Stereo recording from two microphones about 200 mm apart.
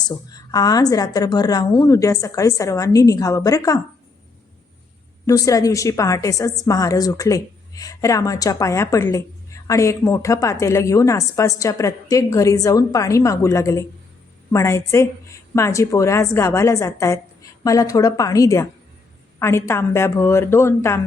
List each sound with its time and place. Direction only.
0.1 s speech: 20° left (ahead or behind)
5.2 s speech: 15° left (ahead or behind)